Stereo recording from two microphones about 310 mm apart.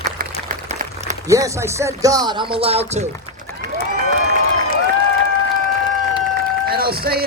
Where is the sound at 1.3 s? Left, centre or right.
Centre.